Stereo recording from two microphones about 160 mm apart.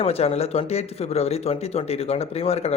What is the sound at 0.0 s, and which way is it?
A man's voice, 40° left (ahead or behind).